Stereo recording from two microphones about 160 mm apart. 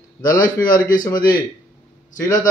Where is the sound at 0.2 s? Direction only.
25° left (ahead or behind).